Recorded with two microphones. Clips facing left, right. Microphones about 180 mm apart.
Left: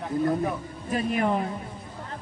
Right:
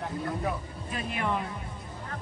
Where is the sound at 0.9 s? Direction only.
40° left (ahead or behind).